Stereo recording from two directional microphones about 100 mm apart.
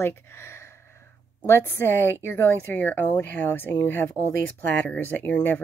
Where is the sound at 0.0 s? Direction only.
25° left (ahead or behind).